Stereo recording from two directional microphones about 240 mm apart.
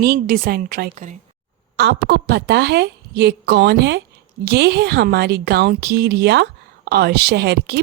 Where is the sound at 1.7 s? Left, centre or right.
Right.